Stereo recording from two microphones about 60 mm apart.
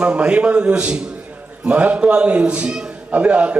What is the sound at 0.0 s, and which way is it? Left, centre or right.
A man's voice, centre.